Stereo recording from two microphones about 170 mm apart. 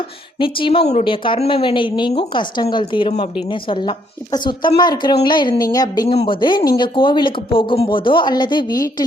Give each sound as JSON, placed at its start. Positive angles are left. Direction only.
{"t": 0.3, "sound": "speech", "side_deg": 30}
{"t": 6.1, "sound": "speech", "side_deg": 30}